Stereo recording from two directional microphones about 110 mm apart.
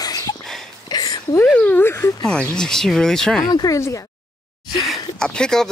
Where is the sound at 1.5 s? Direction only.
15° left (ahead or behind).